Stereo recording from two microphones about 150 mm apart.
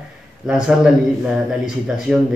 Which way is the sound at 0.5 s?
5° right (ahead or behind).